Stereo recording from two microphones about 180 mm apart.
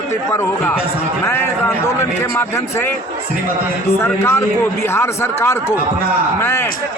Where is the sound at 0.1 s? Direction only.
15° left (ahead or behind).